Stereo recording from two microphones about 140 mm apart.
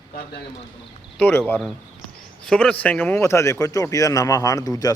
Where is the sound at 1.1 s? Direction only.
10° left (ahead or behind).